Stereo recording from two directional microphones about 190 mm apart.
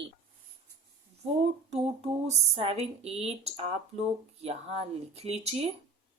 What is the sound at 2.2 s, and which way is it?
Speech, 35° right (ahead or behind).